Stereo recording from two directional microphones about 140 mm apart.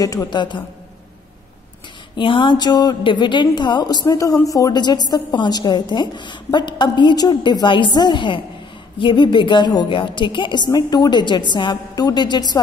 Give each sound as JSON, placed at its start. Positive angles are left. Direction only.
{"t": 0.0, "sound": "a woman's voice", "side_deg": 25}
{"t": 2.1, "sound": "a woman's voice", "side_deg": 35}